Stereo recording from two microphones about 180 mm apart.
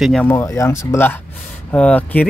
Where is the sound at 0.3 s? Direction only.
15° left (ahead or behind).